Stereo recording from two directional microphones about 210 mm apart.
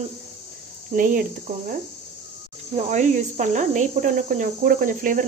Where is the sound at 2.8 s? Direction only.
35° right (ahead or behind).